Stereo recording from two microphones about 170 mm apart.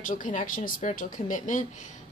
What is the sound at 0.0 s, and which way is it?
Speech, 50° left (ahead or behind).